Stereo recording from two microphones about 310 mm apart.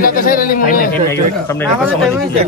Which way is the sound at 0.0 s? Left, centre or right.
Left.